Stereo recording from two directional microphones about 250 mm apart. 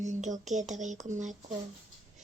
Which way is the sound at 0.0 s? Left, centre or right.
Right.